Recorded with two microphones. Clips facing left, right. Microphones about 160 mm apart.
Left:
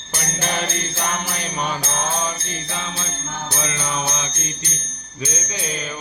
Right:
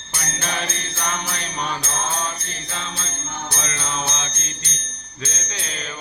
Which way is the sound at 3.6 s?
10° left (ahead or behind).